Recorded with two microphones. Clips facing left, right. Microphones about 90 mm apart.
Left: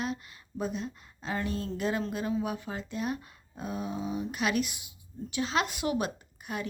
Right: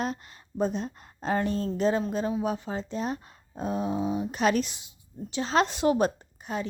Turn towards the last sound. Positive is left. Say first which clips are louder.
# right 4 dB
turn(degrees=-30)  # may be behind; listen again after turning